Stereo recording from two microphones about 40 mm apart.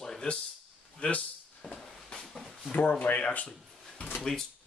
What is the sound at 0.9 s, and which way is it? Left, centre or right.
Speech, left.